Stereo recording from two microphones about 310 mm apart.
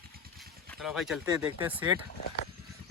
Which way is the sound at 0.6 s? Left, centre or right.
Centre.